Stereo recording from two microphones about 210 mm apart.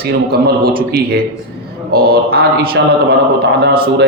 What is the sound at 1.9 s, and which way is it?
A man's voice, 45° right (ahead or behind).